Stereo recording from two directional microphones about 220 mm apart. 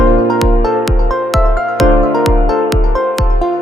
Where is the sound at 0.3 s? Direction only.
Centre (ahead or behind).